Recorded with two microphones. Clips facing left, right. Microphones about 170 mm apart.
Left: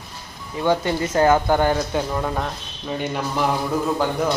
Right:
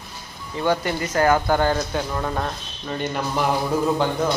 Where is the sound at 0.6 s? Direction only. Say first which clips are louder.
Left 2 dB; 20° left (ahead or behind); by 2.5 s 5° left (ahead or behind).